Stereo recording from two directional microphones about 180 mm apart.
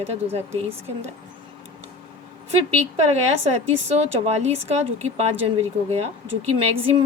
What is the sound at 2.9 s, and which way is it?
Speech, 35° right (ahead or behind).